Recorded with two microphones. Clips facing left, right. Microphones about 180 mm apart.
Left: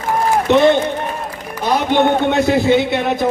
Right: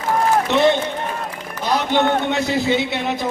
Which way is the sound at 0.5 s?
55° left (ahead or behind).